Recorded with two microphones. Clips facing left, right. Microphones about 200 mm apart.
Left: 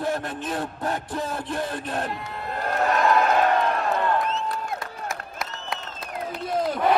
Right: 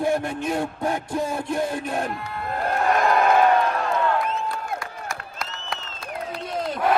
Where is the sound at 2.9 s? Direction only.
55° right (ahead or behind).